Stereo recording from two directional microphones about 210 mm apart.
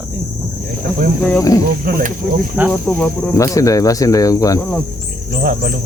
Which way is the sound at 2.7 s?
10° left (ahead or behind).